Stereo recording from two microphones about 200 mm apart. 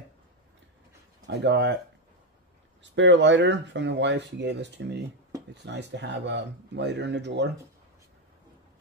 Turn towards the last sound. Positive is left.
turn(degrees=-60)  # may be behind; listen again after turning